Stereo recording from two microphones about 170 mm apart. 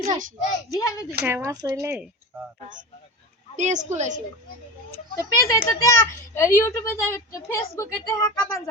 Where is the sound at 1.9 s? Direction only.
10° right (ahead or behind).